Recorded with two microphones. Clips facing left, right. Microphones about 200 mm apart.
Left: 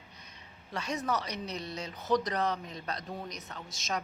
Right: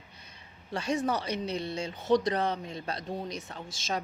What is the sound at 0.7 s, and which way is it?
A woman's voice, 30° right (ahead or behind).